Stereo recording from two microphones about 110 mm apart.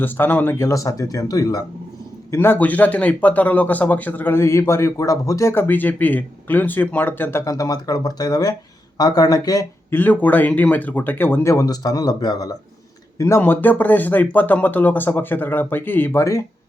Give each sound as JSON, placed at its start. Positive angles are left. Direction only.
{"t": 0.0, "sound": "speech", "side_deg": 20}
{"t": 2.3, "sound": "speech", "side_deg": 20}
{"t": 9.9, "sound": "speech", "side_deg": 15}
{"t": 11.5, "sound": "speech", "side_deg": 35}
{"t": 13.1, "sound": "speech", "side_deg": 25}